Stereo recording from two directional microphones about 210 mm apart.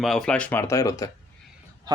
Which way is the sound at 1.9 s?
20° right (ahead or behind).